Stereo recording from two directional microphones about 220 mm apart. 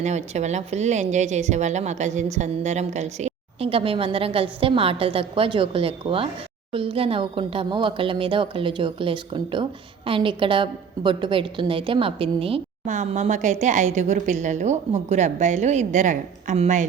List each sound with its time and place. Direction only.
0.0 s a woman's voice: 30° right (ahead or behind)